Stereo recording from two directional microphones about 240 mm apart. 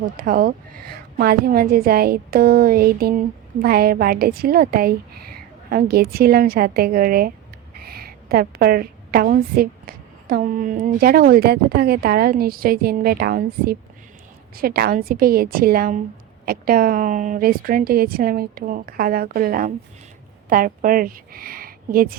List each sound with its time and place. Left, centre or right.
0.0 s a woman's voice: right